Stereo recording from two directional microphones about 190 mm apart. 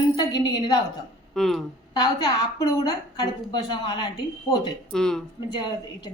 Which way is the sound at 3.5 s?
20° left (ahead or behind).